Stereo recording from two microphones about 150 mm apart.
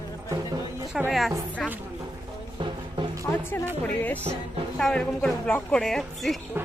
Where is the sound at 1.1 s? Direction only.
Centre (ahead or behind).